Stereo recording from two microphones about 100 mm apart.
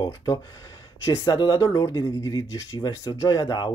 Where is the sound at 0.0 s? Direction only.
35° left (ahead or behind).